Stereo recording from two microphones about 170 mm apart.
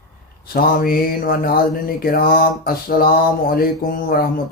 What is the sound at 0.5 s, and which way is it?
Speech, 60° left (ahead or behind).